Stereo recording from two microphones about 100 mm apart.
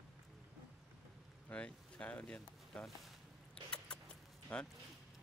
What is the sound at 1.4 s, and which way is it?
Speech, 10° left (ahead or behind).